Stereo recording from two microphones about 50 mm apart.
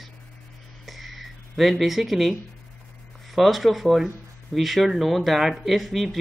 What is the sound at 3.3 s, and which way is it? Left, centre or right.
Speech, centre.